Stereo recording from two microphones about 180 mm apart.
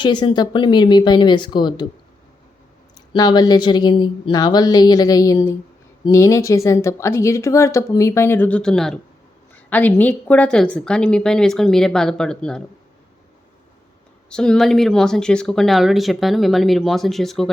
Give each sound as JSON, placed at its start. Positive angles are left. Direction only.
{"t": 0.0, "sound": "speech", "side_deg": 25}
{"t": 3.1, "sound": "speech", "side_deg": 25}
{"t": 14.3, "sound": "speech", "side_deg": 5}